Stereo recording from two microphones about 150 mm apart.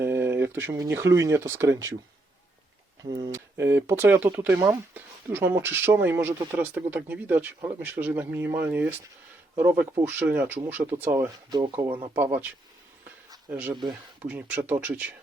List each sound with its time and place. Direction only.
0.0 s speech: 15° right (ahead or behind)
3.0 s speech: 25° right (ahead or behind)
3.6 s speech: 15° right (ahead or behind)
11.6 s speech: 35° right (ahead or behind)
12.1 s speech: 15° right (ahead or behind)
14.3 s speech: 10° right (ahead or behind)